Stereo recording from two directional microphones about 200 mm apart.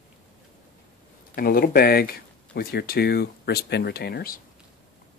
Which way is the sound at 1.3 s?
45° left (ahead or behind).